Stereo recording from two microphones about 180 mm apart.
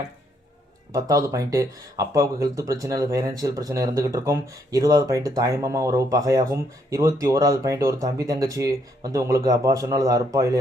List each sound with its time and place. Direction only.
0.9 s speech: 20° right (ahead or behind)